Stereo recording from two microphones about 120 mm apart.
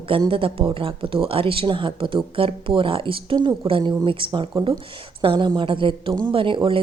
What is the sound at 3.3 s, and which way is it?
Speech, 30° right (ahead or behind).